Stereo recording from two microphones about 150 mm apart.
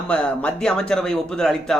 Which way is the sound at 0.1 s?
5° left (ahead or behind).